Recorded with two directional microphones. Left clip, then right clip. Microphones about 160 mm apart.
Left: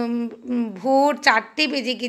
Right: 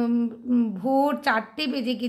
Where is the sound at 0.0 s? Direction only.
10° left (ahead or behind).